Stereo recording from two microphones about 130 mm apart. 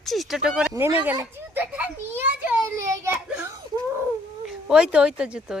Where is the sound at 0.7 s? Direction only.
25° right (ahead or behind).